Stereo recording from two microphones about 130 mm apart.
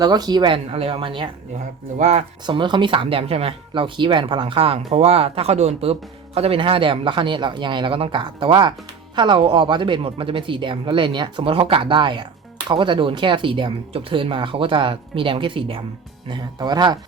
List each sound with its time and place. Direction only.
0.0 s speech: 30° right (ahead or behind)
2.0 s speech: 65° right (ahead or behind)
2.5 s speech: 40° right (ahead or behind)